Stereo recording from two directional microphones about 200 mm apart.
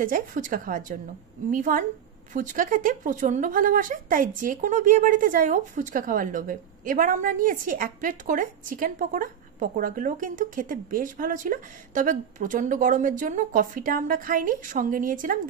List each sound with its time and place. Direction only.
0.0 s a woman's voice: 40° right (ahead or behind)